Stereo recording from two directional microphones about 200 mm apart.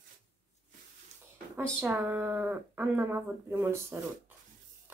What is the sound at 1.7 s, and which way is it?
Speech, 10° right (ahead or behind).